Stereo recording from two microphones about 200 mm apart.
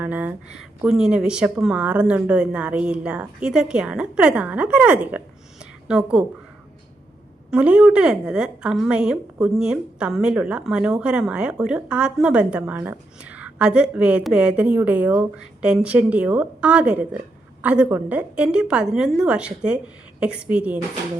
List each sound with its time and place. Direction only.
0.0 s a woman's voice: 10° right (ahead or behind)
7.5 s a woman's voice: 5° right (ahead or behind)